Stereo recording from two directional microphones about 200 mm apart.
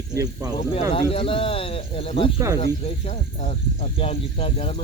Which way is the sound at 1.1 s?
30° left (ahead or behind).